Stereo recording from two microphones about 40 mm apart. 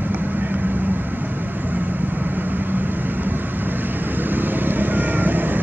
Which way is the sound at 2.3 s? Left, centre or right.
Right.